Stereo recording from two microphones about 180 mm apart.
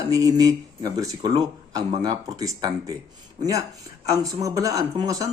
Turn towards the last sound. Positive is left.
turn(degrees=-20)  # may be behind; listen again after turning